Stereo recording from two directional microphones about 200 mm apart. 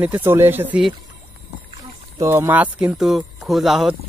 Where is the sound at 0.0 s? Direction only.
10° right (ahead or behind).